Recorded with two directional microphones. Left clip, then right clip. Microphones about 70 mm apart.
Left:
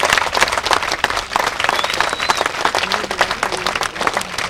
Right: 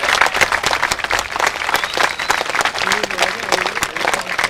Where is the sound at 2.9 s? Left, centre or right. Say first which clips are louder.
Right 1 dB; right.